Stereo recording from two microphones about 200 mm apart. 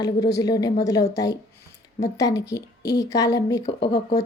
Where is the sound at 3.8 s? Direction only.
55° left (ahead or behind).